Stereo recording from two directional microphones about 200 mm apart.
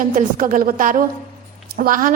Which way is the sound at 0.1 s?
40° right (ahead or behind).